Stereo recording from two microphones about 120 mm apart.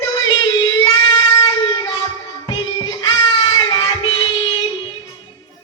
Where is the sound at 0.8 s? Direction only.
30° left (ahead or behind).